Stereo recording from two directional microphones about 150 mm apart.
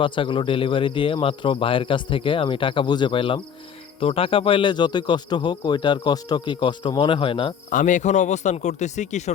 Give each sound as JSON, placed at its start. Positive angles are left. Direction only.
{"t": 0.0, "sound": "speech", "side_deg": 35}
{"t": 7.7, "sound": "speech", "side_deg": 60}